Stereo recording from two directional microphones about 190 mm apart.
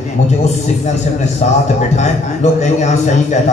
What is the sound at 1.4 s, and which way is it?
A man's voice, 40° left (ahead or behind).